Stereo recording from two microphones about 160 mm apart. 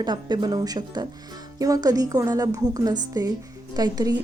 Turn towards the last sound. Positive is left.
turn(degrees=-25)  # may be behind; listen again after turning